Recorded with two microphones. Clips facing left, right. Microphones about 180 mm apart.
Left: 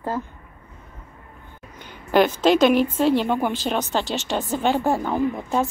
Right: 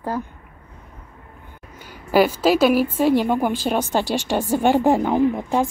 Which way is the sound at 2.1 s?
5° right (ahead or behind).